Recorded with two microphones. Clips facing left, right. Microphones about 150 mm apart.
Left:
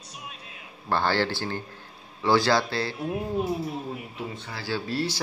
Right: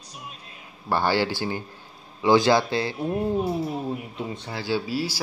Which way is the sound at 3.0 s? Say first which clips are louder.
Right 4 dB; centre (ahead or behind).